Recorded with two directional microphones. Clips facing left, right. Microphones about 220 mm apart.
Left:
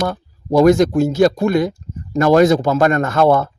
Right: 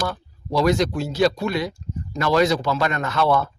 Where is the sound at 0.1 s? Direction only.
50° left (ahead or behind).